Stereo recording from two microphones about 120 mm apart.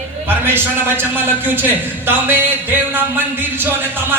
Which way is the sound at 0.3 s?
20° right (ahead or behind).